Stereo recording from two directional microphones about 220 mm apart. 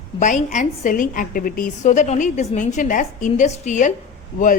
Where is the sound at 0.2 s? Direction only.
35° left (ahead or behind).